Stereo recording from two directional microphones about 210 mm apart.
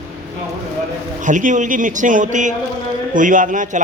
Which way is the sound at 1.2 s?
35° right (ahead or behind).